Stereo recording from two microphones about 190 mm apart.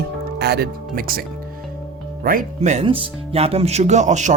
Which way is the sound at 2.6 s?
35° right (ahead or behind).